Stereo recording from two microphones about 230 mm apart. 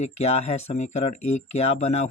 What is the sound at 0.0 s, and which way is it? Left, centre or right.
Speech, left.